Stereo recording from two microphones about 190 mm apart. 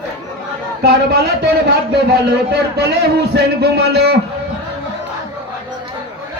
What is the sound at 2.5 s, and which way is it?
Speech, 60° right (ahead or behind).